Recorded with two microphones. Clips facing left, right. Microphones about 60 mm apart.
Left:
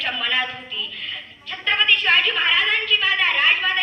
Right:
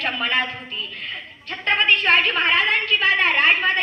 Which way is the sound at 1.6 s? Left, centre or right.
Right.